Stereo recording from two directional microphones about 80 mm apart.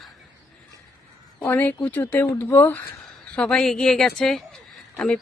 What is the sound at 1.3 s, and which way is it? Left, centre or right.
Speech, left.